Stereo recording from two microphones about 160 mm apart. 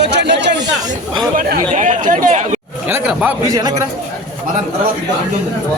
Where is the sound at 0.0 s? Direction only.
90° right.